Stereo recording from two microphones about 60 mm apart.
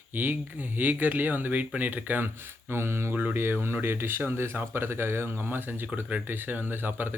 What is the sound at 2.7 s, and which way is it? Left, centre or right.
Speech, right.